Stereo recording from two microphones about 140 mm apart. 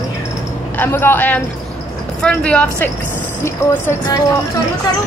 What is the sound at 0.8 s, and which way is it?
Speech, 15° left (ahead or behind).